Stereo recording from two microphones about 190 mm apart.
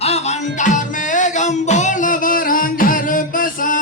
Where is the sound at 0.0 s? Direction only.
35° left (ahead or behind).